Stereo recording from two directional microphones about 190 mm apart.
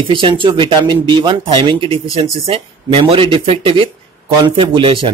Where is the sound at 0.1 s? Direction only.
25° right (ahead or behind).